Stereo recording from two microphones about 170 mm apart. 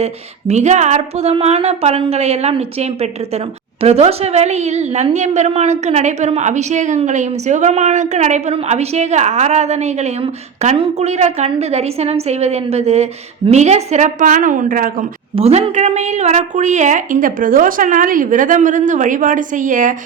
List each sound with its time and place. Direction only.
0.0 s a woman's voice: 40° right (ahead or behind)
15.4 s a woman's voice: 35° right (ahead or behind)